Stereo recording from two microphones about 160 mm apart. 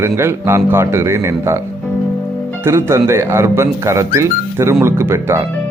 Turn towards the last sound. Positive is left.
turn(degrees=-15)  # may be behind; listen again after turning